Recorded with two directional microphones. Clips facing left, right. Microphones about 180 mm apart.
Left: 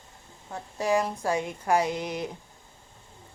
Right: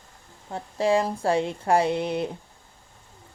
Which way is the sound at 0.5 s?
30° right (ahead or behind).